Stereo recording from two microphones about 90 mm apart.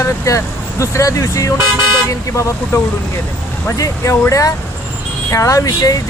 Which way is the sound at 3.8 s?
35° left (ahead or behind).